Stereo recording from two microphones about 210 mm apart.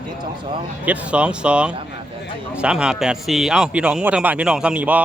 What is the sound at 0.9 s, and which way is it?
A man's voice, 5° right (ahead or behind).